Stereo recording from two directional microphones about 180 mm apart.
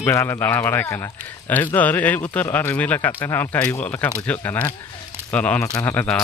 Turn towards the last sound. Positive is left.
turn(degrees=5)  # may be behind; listen again after turning